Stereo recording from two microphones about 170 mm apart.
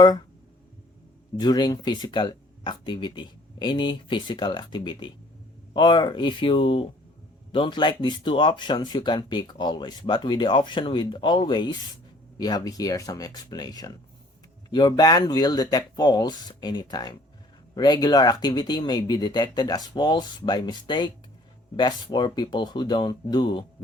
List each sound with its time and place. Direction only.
1.4 s speech: 25° left (ahead or behind)